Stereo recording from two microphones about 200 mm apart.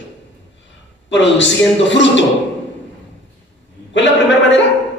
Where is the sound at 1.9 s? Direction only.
65° left (ahead or behind).